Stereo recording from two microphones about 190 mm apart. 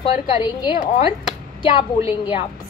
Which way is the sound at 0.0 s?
30° left (ahead or behind).